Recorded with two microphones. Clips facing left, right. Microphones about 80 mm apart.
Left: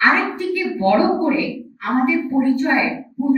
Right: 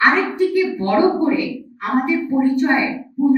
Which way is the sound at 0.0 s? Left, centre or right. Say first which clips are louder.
Right 2 dB; centre.